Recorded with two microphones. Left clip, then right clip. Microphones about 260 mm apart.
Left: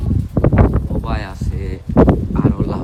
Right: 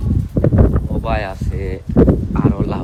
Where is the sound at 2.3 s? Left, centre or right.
Centre.